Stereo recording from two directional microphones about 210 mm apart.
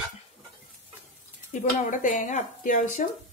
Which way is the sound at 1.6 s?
35° left (ahead or behind).